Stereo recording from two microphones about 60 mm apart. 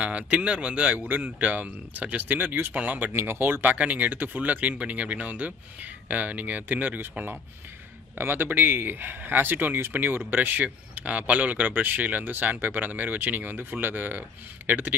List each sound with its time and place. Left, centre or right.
0.0 s speech: right
0.9 s speech: right
3.1 s speech: right